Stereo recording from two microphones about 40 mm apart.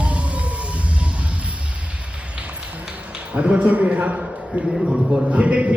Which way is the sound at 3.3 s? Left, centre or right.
Right.